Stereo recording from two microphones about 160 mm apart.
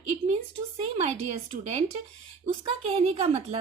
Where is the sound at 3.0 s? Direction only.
40° right (ahead or behind).